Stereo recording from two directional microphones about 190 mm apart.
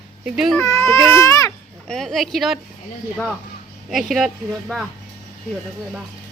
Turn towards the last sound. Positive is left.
turn(degrees=0)  # may be behind; listen again after turning